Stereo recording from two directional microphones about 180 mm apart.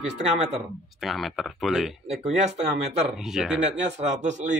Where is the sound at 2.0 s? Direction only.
35° right (ahead or behind).